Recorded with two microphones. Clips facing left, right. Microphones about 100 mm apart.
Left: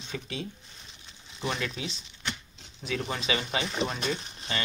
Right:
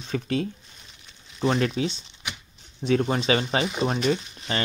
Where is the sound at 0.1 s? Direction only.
55° right (ahead or behind).